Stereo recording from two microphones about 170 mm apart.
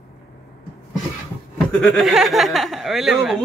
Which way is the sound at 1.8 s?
Centre (ahead or behind).